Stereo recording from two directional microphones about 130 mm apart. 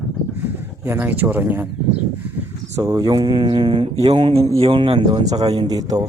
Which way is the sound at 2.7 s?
25° right (ahead or behind).